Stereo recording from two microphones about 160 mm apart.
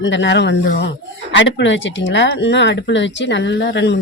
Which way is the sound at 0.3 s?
90° left.